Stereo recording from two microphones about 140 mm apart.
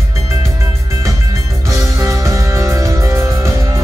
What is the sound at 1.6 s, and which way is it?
Music, 20° right (ahead or behind).